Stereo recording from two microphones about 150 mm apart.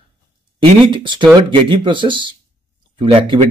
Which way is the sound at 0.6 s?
35° right (ahead or behind).